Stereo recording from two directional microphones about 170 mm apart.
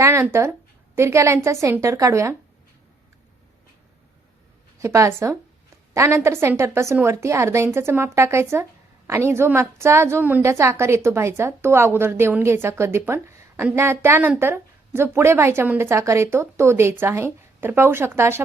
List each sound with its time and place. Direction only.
0.0 s speech: 15° right (ahead or behind)
4.8 s speech: 15° right (ahead or behind)